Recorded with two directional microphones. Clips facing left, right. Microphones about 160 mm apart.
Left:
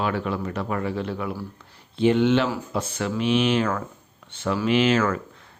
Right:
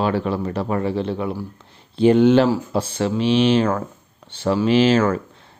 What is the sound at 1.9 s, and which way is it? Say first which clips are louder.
Speech: right 6 dB; 40° right (ahead or behind).